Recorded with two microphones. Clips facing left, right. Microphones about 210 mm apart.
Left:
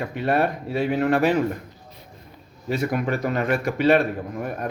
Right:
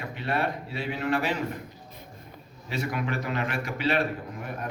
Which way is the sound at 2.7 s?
45° left (ahead or behind).